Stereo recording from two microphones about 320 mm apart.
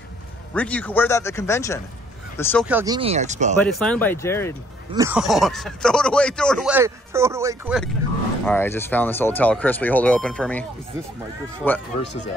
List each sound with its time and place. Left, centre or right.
0.6 s speech: centre
2.6 s speech: centre
3.6 s speech: centre
4.9 s speech: centre
8.5 s speech: centre
11.6 s speech: centre